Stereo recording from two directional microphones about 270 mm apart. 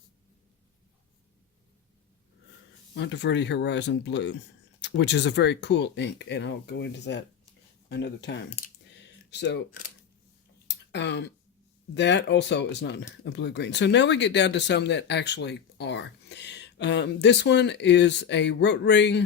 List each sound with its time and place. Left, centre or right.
2.9 s speech: left
10.9 s speech: left